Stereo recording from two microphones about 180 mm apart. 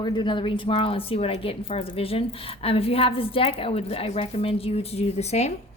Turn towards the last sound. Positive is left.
turn(degrees=35)  # may be behind; listen again after turning